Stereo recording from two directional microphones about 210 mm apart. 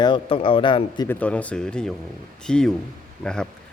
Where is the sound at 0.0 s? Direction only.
25° left (ahead or behind).